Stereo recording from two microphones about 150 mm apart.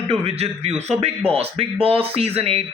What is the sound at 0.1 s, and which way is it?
A man's voice, 45° right (ahead or behind).